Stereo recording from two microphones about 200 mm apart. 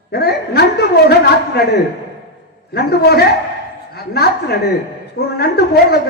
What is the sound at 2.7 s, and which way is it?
A man's voice, 55° left (ahead or behind).